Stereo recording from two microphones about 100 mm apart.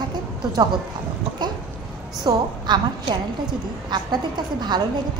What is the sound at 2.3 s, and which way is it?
Speech, 45° right (ahead or behind).